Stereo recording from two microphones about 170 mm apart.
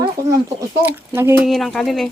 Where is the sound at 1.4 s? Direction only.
Centre (ahead or behind).